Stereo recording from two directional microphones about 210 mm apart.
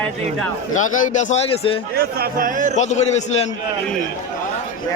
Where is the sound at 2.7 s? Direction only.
35° left (ahead or behind).